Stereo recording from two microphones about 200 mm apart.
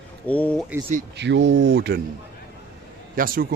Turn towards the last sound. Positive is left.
turn(degrees=-45)  # may be behind; listen again after turning